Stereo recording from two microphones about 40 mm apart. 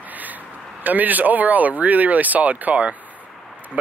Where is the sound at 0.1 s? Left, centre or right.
Right.